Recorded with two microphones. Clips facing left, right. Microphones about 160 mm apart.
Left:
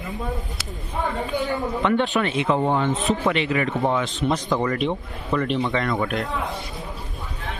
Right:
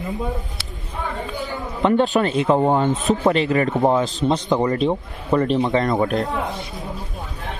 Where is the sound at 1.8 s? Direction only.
35° right (ahead or behind).